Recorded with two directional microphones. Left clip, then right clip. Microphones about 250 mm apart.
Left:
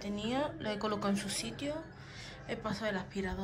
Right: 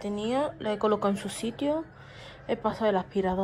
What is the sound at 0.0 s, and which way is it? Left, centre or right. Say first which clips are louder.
Speech: right 7 dB; centre.